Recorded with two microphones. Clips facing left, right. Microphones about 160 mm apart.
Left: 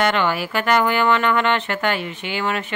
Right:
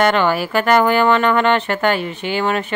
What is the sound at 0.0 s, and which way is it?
Speech, 40° right (ahead or behind).